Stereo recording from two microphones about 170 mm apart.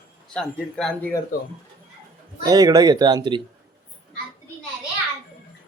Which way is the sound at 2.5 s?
20° right (ahead or behind).